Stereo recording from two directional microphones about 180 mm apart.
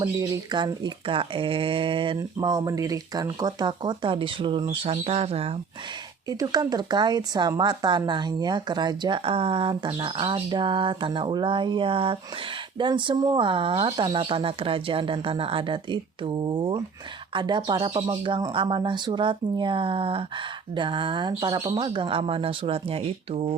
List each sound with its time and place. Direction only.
0.0 s speech: 25° right (ahead or behind)
6.2 s speech: 20° right (ahead or behind)